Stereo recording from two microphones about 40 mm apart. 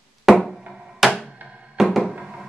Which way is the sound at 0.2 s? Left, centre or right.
Centre.